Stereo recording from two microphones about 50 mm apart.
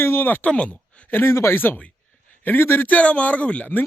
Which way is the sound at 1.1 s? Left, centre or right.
Left.